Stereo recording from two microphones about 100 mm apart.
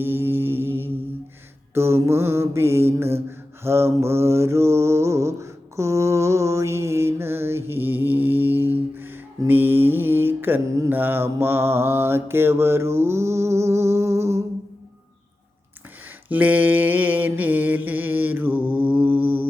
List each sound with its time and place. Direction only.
0.0 s mantra: 20° right (ahead or behind)
16.3 s mantra: 15° right (ahead or behind)